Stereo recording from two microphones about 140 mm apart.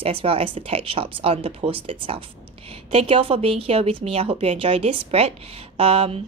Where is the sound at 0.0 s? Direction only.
45° right (ahead or behind).